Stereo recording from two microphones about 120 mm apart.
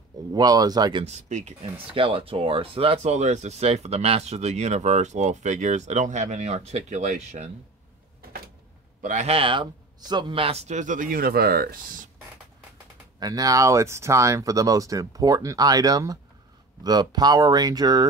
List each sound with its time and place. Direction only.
0.3 s speech: 35° right (ahead or behind)
1.0 s speech: 75° right (ahead or behind)
2.0 s a man's voice: 50° right (ahead or behind)
3.1 s speech: 75° right (ahead or behind)
9.0 s speech: 85° right
9.3 s a man's voice: 45° right (ahead or behind); by 11.1 s 90° right
13.2 s speech: 30° right (ahead or behind)